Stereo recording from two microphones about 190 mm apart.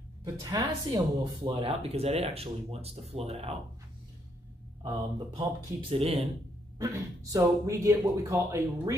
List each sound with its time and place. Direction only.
0.2 s speech: 20° right (ahead or behind)
5.3 s speech: 30° right (ahead or behind)
6.8 s speech: 15° right (ahead or behind)